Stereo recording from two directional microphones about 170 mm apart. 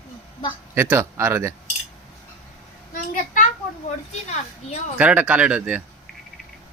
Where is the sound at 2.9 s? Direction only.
50° left (ahead or behind).